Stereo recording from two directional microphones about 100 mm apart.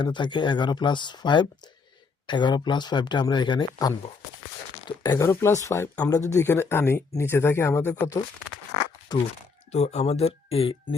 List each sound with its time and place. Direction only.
0.0 s speech: 50° left (ahead or behind)
5.1 s speech: 30° left (ahead or behind)
9.1 s speech: 45° left (ahead or behind)
9.7 s speech: 90° left; by 10.9 s 70° left (ahead or behind)